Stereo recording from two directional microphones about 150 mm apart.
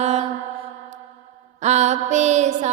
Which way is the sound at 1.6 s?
50° right (ahead or behind).